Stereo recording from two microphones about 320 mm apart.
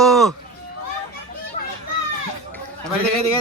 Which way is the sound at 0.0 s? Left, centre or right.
Centre.